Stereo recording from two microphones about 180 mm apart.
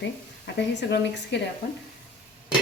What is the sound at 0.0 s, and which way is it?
Speech, 70° left (ahead or behind).